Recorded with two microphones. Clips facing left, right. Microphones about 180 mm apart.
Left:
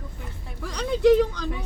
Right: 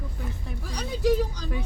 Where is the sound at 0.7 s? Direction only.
65° left (ahead or behind).